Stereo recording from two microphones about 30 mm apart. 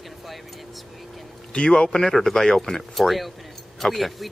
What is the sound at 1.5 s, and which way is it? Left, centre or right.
Speech, left.